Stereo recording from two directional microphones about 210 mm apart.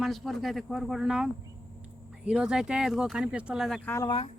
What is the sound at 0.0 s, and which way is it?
Speech, centre (ahead or behind).